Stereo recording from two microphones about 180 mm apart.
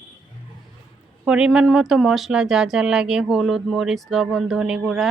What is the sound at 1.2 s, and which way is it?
Speech, 5° right (ahead or behind).